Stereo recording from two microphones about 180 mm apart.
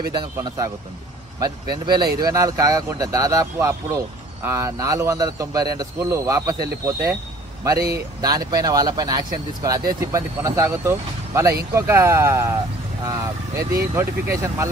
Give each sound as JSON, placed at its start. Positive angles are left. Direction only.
{"t": 0.1, "sound": "speech", "side_deg": -20}
{"t": 8.2, "sound": "speech", "side_deg": -20}